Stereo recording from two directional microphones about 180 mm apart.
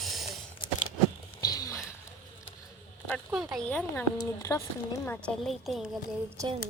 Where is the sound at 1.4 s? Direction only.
20° left (ahead or behind).